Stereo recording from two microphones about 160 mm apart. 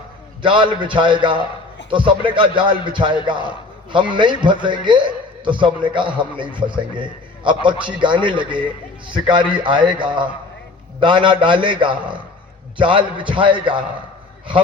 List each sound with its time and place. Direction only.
0.4 s a man's voice: 30° right (ahead or behind)